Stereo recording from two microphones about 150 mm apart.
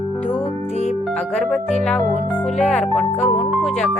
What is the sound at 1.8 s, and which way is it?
Speech, 5° left (ahead or behind).